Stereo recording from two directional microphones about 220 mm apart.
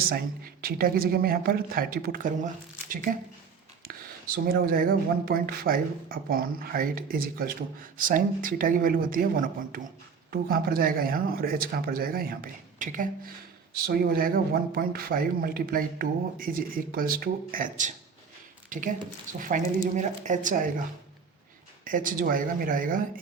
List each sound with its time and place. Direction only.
0.0 s speech: 40° right (ahead or behind)
4.4 s speech: 40° right (ahead or behind)
21.8 s speech: 40° right (ahead or behind)